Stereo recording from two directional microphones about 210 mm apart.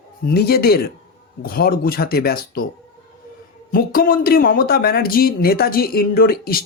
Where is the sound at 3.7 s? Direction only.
45° left (ahead or behind).